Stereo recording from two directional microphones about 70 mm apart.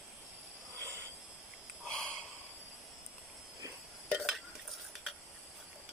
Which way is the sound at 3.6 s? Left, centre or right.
Right.